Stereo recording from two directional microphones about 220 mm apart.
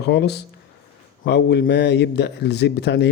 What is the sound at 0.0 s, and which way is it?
Speech, 50° left (ahead or behind).